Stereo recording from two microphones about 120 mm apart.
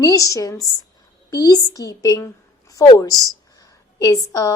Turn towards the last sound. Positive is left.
turn(degrees=30)  # may be behind; listen again after turning